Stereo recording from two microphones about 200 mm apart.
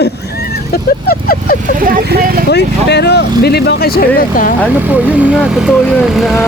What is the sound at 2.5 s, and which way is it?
Speech, 55° left (ahead or behind).